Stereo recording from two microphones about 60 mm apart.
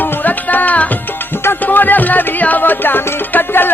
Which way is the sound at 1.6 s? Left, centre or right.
Left.